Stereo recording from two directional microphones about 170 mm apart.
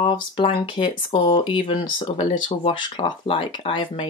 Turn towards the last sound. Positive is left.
turn(degrees=30)  # may be behind; listen again after turning